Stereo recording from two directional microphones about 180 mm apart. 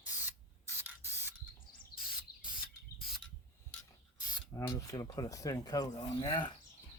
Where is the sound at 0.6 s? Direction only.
10° right (ahead or behind).